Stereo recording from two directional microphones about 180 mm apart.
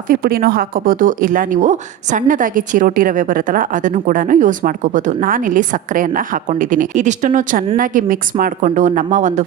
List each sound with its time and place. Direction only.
0.1 s speech: 55° right (ahead or behind)